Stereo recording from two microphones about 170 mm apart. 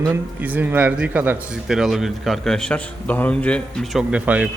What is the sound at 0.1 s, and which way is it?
Speech, 10° right (ahead or behind).